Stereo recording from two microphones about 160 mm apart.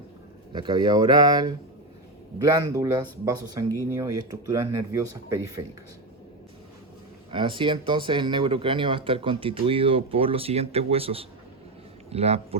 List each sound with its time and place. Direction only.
0.5 s speech: 30° right (ahead or behind)
3.9 s speech: 20° right (ahead or behind)
7.3 s speech: 30° right (ahead or behind)